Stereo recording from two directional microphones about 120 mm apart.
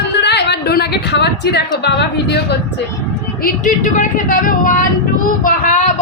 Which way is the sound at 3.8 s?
90° left.